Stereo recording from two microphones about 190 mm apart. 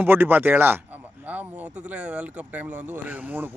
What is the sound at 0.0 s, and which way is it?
Speech, 10° right (ahead or behind).